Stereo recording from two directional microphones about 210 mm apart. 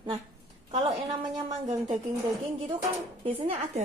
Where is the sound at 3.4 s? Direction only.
30° right (ahead or behind).